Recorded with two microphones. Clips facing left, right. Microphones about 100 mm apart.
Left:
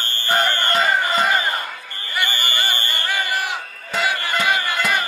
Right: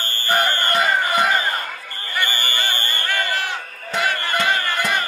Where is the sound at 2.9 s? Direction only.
15° left (ahead or behind).